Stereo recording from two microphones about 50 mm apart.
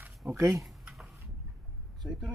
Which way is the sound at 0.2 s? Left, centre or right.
Right.